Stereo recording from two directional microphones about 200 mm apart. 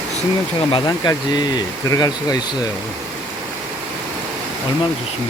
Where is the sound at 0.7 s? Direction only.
20° left (ahead or behind).